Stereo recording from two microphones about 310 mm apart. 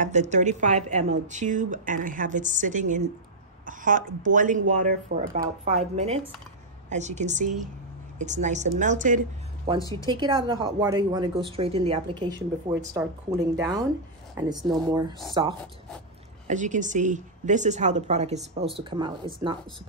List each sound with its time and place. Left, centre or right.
0.0 s speech: right
9.8 s a woman's voice: centre
10.0 s speech: centre